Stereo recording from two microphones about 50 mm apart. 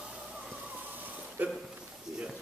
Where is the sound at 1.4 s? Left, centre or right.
Right.